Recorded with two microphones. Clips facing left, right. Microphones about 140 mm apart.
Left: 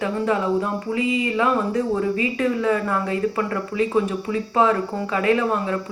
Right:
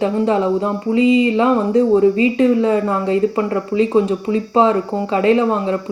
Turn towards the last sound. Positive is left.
turn(degrees=-25)  # may be behind; listen again after turning